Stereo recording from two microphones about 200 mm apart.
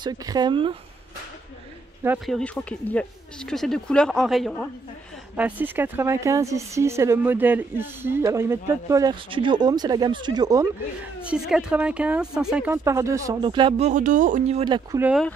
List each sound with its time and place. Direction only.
0.0 s speech: 20° right (ahead or behind)
2.0 s speech: centre (ahead or behind); by 10.7 s 20° right (ahead or behind)
11.1 s speech: 5° right (ahead or behind); by 14.6 s 35° right (ahead or behind)
14.6 s speech: 20° right (ahead or behind)
15.0 s speech: 5° right (ahead or behind)